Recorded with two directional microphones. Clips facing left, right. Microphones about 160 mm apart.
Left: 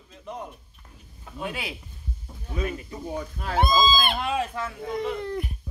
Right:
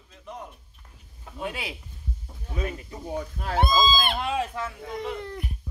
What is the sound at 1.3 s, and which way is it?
Speech, 25° right (ahead or behind).